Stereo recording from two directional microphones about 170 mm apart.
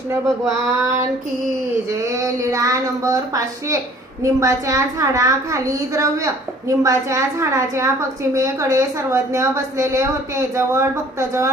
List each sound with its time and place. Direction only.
1.9 s a woman's voice: 20° right (ahead or behind)